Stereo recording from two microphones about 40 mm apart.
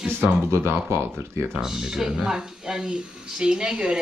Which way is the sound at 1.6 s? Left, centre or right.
Centre.